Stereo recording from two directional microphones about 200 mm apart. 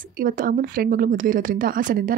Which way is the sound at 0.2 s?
45° right (ahead or behind).